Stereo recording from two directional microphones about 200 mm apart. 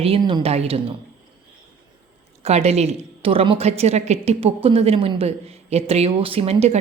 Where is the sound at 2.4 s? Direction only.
30° right (ahead or behind).